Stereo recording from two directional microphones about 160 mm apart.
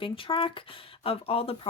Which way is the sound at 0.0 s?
35° left (ahead or behind).